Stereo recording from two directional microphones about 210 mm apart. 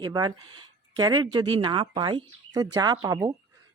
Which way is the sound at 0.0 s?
20° right (ahead or behind).